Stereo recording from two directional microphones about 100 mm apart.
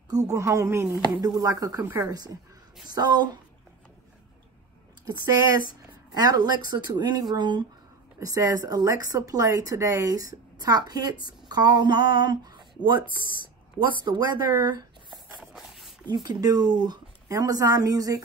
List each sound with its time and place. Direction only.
0.1 s a woman's voice: 35° right (ahead or behind)
1.2 s a woman's voice: 40° right (ahead or behind)
1.8 s a woman's voice: 20° right (ahead or behind)
2.0 s a woman's voice: 40° right (ahead or behind)
5.9 s a woman's voice: 40° right (ahead or behind)
15.4 s walk: 5° right (ahead or behind)
16.1 s a woman's voice: 45° right (ahead or behind)